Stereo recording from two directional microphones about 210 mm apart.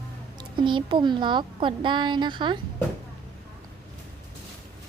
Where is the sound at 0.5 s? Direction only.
20° right (ahead or behind).